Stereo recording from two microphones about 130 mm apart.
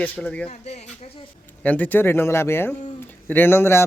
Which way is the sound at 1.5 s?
10° left (ahead or behind).